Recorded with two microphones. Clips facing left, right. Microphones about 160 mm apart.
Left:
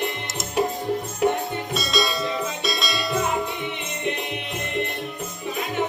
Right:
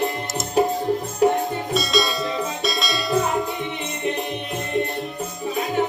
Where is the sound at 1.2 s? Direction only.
35° right (ahead or behind).